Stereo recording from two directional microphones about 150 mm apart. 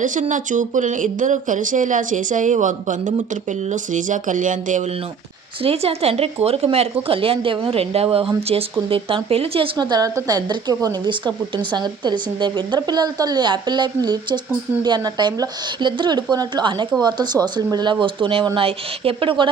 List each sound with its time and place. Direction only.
0.0 s speech: 55° right (ahead or behind)
5.6 s speech: 40° right (ahead or behind)
9.7 s a woman's voice: 30° right (ahead or behind)